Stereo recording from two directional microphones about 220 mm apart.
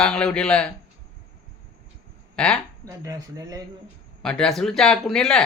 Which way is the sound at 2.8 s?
15° right (ahead or behind).